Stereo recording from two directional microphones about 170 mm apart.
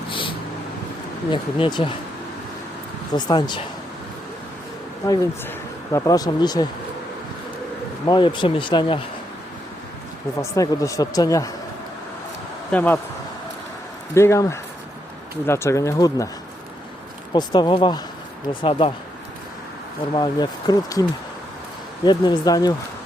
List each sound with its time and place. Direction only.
0.1 s vehicle: 30° left (ahead or behind)
1.3 s speech: 30° left (ahead or behind)
3.2 s speech: 25° left (ahead or behind)
5.0 s speech: 20° left (ahead or behind)
8.0 s speech: 25° left (ahead or behind)
10.4 s speech: 20° left (ahead or behind)
12.7 s speech: 10° left (ahead or behind)
14.1 s speech: 15° left (ahead or behind)
17.3 s speech: 25° left (ahead or behind)
20.1 s speech: 25° left (ahead or behind)
22.0 s speech: 25° left (ahead or behind)